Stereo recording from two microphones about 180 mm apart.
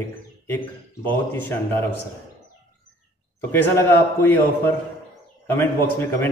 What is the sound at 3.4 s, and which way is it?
A man's voice, 15° left (ahead or behind).